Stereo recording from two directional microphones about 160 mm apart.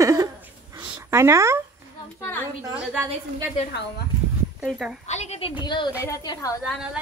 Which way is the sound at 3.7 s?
80° left.